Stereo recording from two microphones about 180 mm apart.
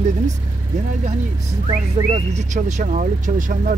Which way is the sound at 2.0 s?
40° right (ahead or behind).